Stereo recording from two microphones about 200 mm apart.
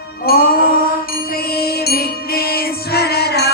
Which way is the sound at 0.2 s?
50° left (ahead or behind).